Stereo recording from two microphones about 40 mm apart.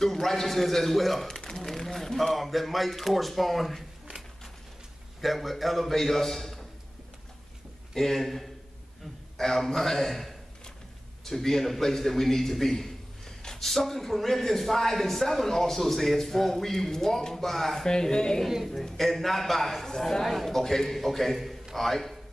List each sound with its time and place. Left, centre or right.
0.0 s a man's voice: centre
5.2 s a man's voice: centre
7.9 s a man's voice: centre
13.4 s a sound: centre
13.7 s a man's voice: centre
17.8 s a man's voice: centre
18.4 s a woman's voice: centre
18.9 s a man's voice: centre